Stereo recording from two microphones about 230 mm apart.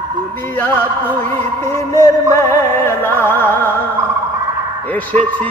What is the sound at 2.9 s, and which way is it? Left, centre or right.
Music, centre.